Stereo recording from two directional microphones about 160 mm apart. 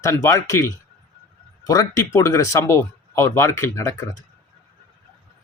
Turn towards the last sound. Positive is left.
turn(degrees=20)  # may be behind; listen again after turning